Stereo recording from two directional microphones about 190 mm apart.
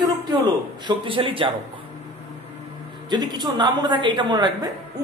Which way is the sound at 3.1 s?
20° right (ahead or behind).